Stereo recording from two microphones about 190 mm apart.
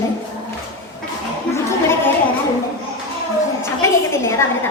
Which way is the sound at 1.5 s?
10° left (ahead or behind).